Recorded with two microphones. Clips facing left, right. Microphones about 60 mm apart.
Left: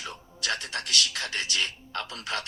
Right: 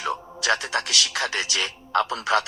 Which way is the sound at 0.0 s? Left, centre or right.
Right.